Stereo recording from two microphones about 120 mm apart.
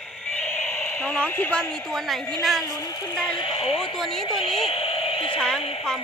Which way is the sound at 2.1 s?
Centre (ahead or behind).